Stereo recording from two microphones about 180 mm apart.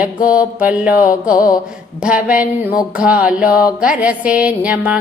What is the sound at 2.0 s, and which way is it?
Speech, 5° right (ahead or behind).